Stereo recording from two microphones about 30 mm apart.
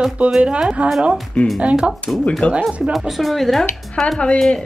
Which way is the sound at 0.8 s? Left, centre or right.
Right.